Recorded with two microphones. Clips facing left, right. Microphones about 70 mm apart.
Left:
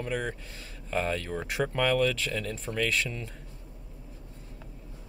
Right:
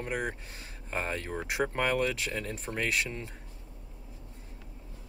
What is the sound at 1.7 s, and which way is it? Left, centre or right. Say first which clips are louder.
Speech: left 5 dB; right.